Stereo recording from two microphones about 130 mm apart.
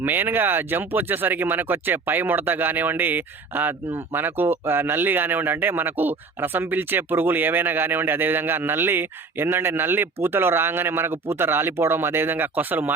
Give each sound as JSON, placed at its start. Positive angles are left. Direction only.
{"t": 0.0, "sound": "speech", "side_deg": -15}